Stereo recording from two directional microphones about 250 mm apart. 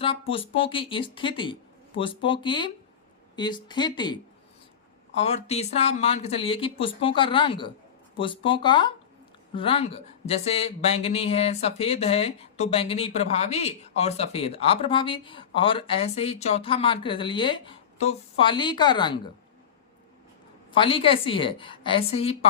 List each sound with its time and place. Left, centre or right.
0.0 s speech: left
20.7 s speech: left